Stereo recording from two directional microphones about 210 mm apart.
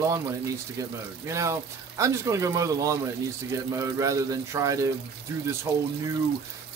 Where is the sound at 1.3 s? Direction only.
15° right (ahead or behind).